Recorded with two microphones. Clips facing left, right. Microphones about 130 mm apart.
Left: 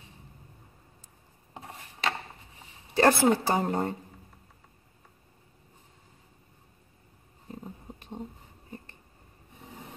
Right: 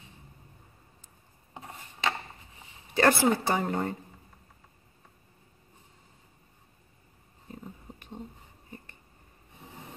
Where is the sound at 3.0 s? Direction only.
40° left (ahead or behind).